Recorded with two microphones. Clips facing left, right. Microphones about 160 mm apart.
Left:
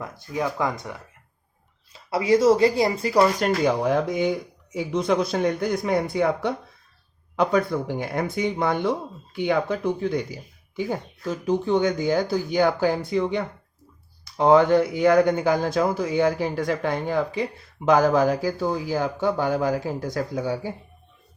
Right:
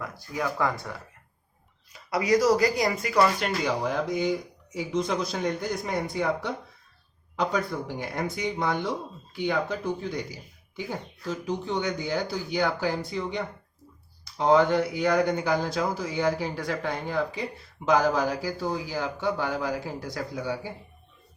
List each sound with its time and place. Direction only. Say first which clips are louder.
0.0 s speech: left 4 dB; 20° left (ahead or behind)
3.6 s speech: left 6 dB; 55° left (ahead or behind)
11.4 s a man's voice: left 9 dB; 50° left (ahead or behind)